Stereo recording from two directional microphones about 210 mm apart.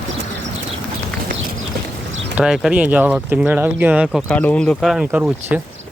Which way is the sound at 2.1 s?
65° right (ahead or behind).